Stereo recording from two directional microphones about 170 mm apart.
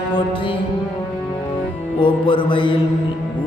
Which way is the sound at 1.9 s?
30° left (ahead or behind).